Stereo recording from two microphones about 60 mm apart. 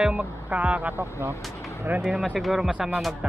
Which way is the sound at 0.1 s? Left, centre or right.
Right.